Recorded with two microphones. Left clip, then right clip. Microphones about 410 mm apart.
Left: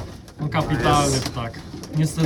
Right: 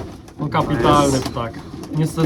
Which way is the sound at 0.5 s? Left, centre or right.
Centre.